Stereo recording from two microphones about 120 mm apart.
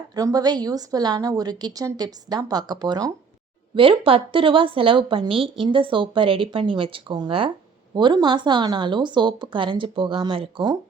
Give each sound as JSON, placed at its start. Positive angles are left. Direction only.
{"t": 0.1, "sound": "a woman's voice", "side_deg": -30}
{"t": 3.8, "sound": "a woman's voice", "side_deg": -50}